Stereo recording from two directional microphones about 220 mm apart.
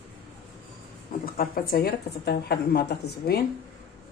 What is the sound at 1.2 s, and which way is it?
Speech, 40° left (ahead or behind).